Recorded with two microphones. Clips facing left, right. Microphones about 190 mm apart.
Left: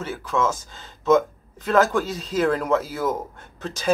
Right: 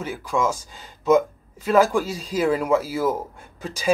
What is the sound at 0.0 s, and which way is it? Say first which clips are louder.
Speech: even; 10° right (ahead or behind).